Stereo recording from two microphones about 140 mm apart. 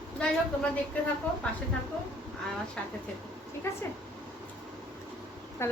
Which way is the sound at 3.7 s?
20° left (ahead or behind).